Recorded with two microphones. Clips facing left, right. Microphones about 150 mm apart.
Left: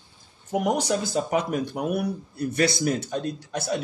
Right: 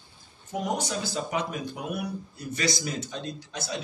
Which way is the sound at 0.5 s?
65° left (ahead or behind).